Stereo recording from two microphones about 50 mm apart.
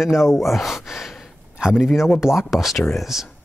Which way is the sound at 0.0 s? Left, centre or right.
Centre.